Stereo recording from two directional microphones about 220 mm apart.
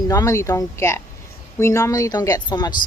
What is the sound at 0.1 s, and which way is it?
Speech, 15° left (ahead or behind).